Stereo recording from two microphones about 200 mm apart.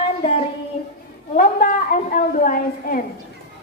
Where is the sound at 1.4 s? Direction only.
45° left (ahead or behind).